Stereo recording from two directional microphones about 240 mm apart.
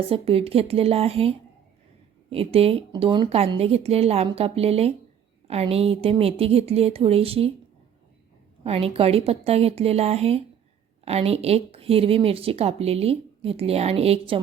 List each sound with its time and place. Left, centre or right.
0.1 s speech: right
8.6 s speech: right